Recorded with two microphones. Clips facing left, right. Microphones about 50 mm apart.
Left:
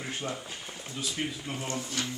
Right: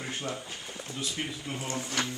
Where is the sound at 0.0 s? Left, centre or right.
Centre.